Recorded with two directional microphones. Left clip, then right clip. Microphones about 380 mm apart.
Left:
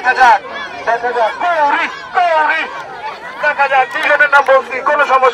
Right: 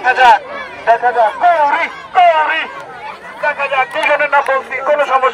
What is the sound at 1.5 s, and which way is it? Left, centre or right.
A man's voice, centre.